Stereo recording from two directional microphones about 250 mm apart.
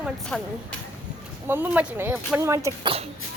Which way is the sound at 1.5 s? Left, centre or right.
Centre.